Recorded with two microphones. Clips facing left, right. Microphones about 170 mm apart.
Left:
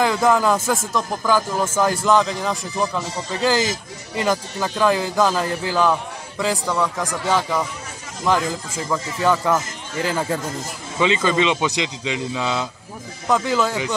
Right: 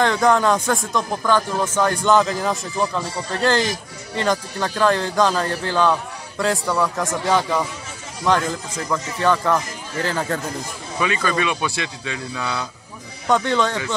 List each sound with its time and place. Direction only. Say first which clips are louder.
0.0 s speech: even; 5° left (ahead or behind)
4.2 s speech: even; 5° left (ahead or behind)
11.0 s speech: left 3 dB; 20° left (ahead or behind)
13.3 s speech: right 1 dB; 5° left (ahead or behind)